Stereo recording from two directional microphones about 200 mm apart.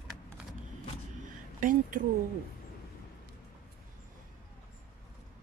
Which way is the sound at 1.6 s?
40° right (ahead or behind).